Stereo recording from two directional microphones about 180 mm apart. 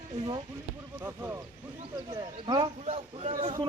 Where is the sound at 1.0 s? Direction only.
15° right (ahead or behind).